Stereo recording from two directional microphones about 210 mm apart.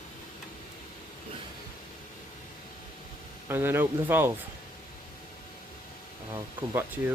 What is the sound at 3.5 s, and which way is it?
Speech, 10° right (ahead or behind).